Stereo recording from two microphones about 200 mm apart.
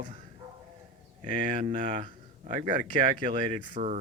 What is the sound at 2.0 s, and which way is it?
Speech, 40° right (ahead or behind).